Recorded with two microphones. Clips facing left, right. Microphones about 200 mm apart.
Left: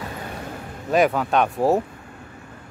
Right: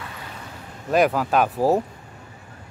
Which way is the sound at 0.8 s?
Centre (ahead or behind).